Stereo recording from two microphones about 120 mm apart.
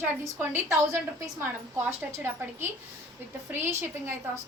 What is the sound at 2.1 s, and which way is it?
A woman's voice, 20° right (ahead or behind).